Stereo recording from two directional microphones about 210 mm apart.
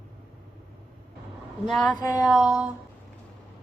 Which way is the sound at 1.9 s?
15° left (ahead or behind).